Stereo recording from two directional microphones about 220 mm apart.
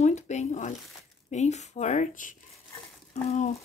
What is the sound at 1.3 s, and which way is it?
Speech, 30° left (ahead or behind).